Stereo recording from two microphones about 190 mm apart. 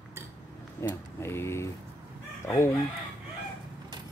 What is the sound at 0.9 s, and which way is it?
Speech, 15° left (ahead or behind).